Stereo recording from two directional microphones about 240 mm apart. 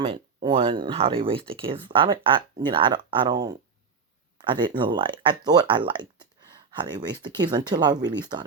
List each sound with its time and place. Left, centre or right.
0.4 s speech: right